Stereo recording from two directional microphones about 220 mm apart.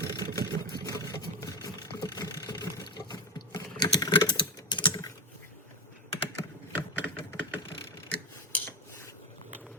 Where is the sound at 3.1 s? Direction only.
15° left (ahead or behind).